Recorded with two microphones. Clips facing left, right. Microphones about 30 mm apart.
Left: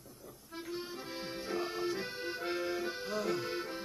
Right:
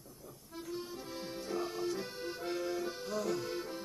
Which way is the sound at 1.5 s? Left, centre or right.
Left.